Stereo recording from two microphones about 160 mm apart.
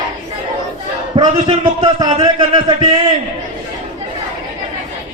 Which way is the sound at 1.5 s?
25° right (ahead or behind).